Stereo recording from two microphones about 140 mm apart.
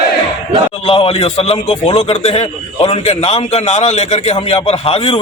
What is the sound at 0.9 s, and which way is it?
A man's voice, 40° left (ahead or behind).